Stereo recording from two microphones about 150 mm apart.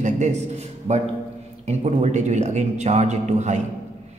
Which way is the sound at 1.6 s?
50° right (ahead or behind).